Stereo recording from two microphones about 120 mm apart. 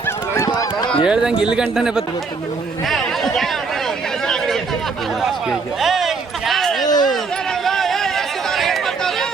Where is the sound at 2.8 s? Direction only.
Centre (ahead or behind).